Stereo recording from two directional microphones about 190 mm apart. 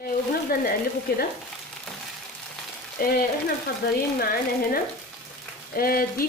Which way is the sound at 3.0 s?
50° left (ahead or behind).